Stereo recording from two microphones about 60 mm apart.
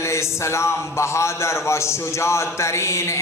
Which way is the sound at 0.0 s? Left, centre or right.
Left.